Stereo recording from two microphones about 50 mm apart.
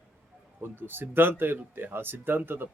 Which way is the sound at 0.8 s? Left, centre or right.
Right.